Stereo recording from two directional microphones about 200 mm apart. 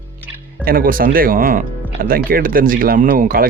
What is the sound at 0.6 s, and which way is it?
Speech, 45° right (ahead or behind).